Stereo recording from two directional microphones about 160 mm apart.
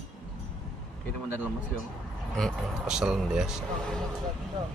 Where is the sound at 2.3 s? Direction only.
Centre (ahead or behind).